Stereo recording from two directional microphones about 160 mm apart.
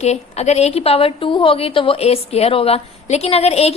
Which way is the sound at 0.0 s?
45° left (ahead or behind).